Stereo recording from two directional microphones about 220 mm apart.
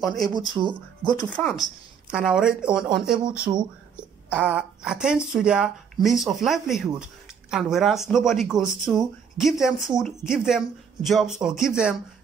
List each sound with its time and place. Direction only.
0.0 s speech: centre (ahead or behind)
0.3 s speech: 20° right (ahead or behind)
1.3 s speech: centre (ahead or behind)
3.5 s speech: 25° right (ahead or behind)
4.3 s speech: 5° right (ahead or behind)